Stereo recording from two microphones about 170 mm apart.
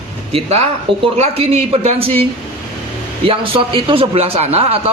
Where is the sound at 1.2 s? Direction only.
35° right (ahead or behind).